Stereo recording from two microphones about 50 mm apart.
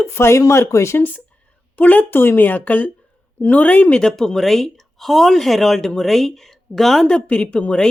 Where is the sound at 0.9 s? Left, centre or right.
Left.